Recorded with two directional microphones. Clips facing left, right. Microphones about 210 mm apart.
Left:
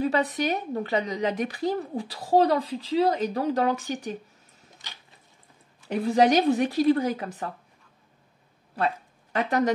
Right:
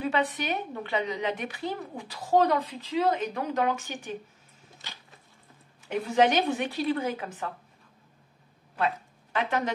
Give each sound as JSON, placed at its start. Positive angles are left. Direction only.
{"t": 0.0, "sound": "a woman's voice", "side_deg": 40}
{"t": 5.9, "sound": "a woman's voice", "side_deg": 35}
{"t": 8.7, "sound": "a sound", "side_deg": 35}